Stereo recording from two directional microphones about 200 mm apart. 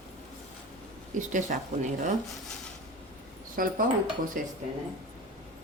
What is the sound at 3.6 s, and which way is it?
Speech, 45° right (ahead or behind).